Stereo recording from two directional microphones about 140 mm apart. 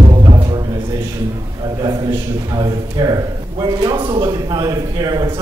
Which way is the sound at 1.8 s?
30° right (ahead or behind).